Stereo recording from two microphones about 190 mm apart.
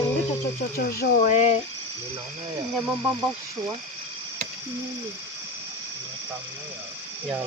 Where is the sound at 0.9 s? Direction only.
45° left (ahead or behind).